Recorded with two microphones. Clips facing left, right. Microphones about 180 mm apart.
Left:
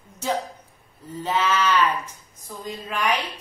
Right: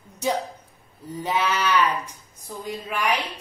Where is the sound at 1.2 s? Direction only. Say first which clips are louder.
Left 1 dB; 15° right (ahead or behind).